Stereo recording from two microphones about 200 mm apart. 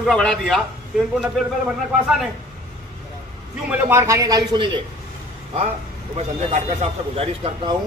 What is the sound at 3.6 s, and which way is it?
A man's voice, 10° right (ahead or behind).